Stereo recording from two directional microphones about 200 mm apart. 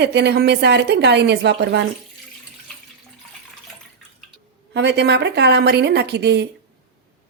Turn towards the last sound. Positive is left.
turn(degrees=-55)  # may be behind; listen again after turning